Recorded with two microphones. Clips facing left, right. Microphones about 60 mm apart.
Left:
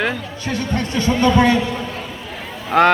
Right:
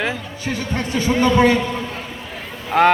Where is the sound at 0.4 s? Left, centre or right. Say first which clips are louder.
Left 1 dB; centre.